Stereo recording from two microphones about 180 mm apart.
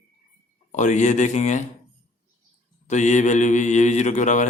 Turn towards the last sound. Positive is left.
turn(degrees=45)  # may be behind; listen again after turning